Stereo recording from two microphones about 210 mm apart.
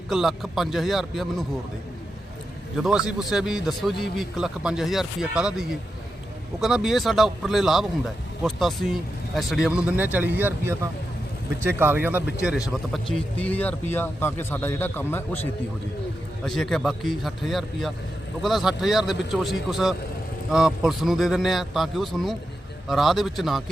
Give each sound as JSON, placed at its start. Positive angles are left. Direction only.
{"t": 0.1, "sound": "a man's voice", "side_deg": 0}
{"t": 2.7, "sound": "a man's voice", "side_deg": 0}